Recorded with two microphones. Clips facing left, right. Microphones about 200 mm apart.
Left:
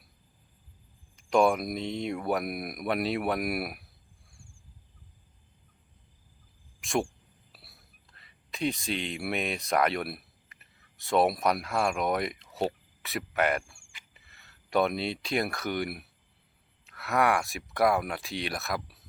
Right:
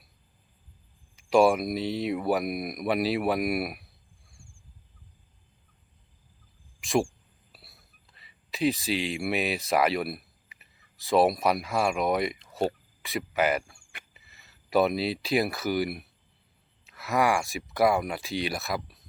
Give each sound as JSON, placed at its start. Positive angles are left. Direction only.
{"t": 1.1, "sound": "speech", "side_deg": 0}
{"t": 6.8, "sound": "a man's voice", "side_deg": 0}